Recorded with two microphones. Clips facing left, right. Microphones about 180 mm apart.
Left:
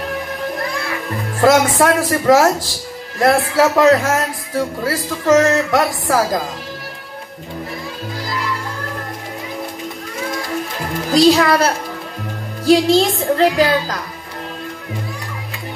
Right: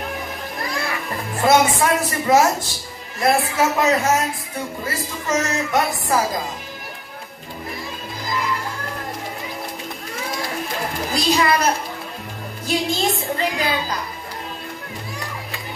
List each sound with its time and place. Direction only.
1.4 s speech: 90° left
11.1 s speech: 90° left